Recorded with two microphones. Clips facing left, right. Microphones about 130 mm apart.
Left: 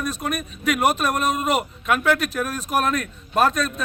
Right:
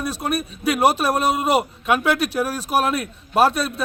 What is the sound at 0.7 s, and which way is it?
Speech, 35° right (ahead or behind).